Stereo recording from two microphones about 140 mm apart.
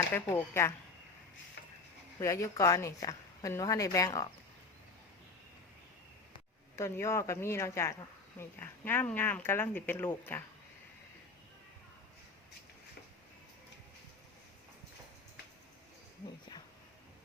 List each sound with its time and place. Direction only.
0.1 s speech: 15° left (ahead or behind)
2.1 s a woman's voice: 20° left (ahead or behind)
6.7 s a woman's voice: 20° left (ahead or behind)